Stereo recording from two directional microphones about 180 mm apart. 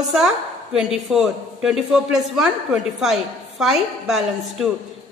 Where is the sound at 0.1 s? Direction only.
Centre (ahead or behind).